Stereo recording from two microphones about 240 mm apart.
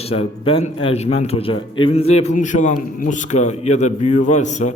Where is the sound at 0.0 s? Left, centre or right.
Left.